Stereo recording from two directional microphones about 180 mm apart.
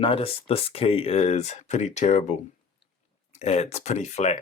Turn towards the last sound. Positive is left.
turn(degrees=40)  # may be behind; listen again after turning